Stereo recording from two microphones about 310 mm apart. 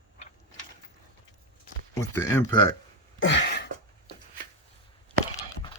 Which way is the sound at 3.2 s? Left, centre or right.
Left.